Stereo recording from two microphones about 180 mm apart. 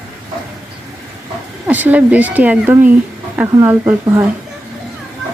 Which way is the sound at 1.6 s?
10° right (ahead or behind).